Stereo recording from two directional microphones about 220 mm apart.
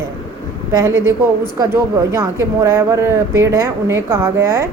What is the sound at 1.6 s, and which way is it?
Speech, 15° right (ahead or behind).